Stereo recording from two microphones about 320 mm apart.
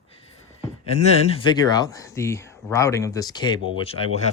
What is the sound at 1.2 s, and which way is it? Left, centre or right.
Speech, centre.